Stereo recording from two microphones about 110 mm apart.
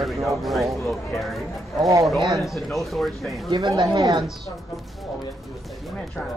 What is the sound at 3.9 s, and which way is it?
Speech, 35° right (ahead or behind).